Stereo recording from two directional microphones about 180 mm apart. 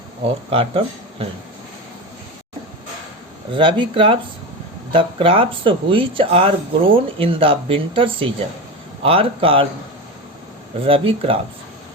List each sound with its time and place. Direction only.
0.5 s speech: 30° right (ahead or behind)
3.5 s speech: 25° right (ahead or behind)
10.8 s speech: 30° right (ahead or behind)